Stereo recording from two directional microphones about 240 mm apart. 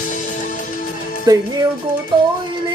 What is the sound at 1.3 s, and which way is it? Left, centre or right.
Music, centre.